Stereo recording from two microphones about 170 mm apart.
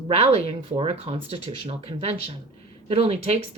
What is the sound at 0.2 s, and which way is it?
A woman's voice, 35° right (ahead or behind).